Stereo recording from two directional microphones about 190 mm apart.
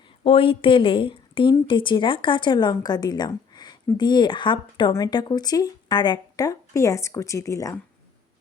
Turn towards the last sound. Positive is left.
turn(degrees=15)  # may be behind; listen again after turning